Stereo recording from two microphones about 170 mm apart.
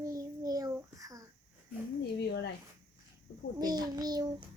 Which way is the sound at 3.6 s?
25° right (ahead or behind).